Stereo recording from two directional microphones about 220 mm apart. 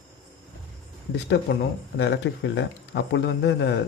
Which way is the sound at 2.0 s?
55° left (ahead or behind).